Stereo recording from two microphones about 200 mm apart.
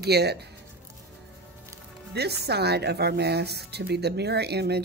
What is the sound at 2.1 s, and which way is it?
A woman's voice, 55° right (ahead or behind).